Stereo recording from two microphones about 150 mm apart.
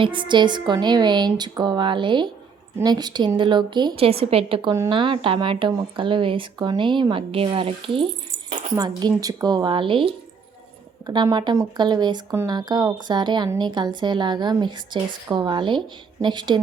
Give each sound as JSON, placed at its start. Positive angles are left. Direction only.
{"t": 0.0, "sound": "a woman's voice", "side_deg": -35}